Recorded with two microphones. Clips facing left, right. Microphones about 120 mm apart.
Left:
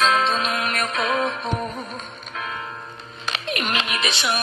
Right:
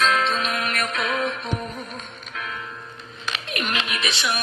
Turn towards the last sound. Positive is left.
turn(degrees=25)  # may be behind; listen again after turning